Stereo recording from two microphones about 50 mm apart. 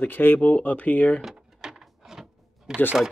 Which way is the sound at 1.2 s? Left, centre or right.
Centre.